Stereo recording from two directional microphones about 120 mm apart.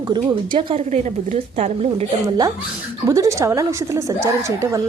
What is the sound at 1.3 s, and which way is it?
Speech, 60° right (ahead or behind).